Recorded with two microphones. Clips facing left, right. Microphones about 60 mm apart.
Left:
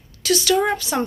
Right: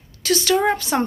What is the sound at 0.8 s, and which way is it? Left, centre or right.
Speech, right.